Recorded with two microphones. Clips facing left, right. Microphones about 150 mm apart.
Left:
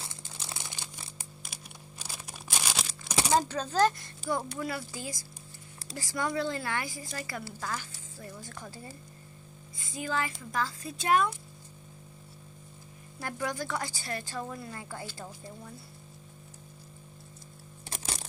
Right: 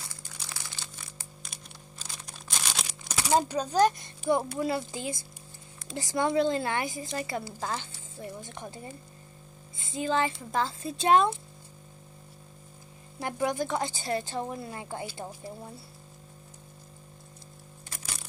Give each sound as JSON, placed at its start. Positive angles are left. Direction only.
{"t": 0.0, "sound": "crumpling", "side_deg": 25}
{"t": 1.4, "sound": "a sound", "side_deg": 5}
{"t": 3.3, "sound": "a woman's voice", "side_deg": -15}
{"t": 13.2, "sound": "a woman's voice", "side_deg": -20}
{"t": 17.9, "sound": "music", "side_deg": 25}